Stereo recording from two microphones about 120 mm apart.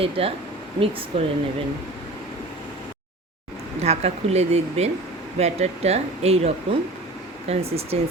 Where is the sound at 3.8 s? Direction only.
60° right (ahead or behind).